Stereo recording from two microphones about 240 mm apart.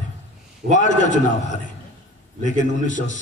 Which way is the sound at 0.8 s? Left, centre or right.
Left.